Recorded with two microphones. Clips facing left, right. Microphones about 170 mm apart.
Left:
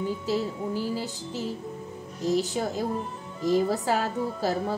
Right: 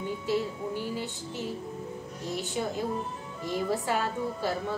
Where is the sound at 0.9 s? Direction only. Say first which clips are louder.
Left 3 dB; 35° left (ahead or behind).